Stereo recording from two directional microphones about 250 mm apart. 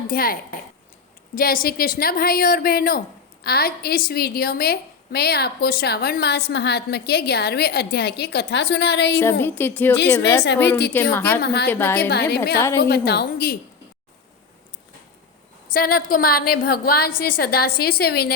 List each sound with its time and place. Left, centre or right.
0.1 s a woman's voice: left
1.4 s a woman's voice: left
9.4 s speech: centre
10.4 s a woman's voice: left
10.9 s speech: centre
11.3 s a woman's voice: left
11.7 s speech: centre
12.8 s a woman's voice: left
15.7 s a woman's voice: left
17.1 s a woman's voice: left
17.3 s a woman's voice: left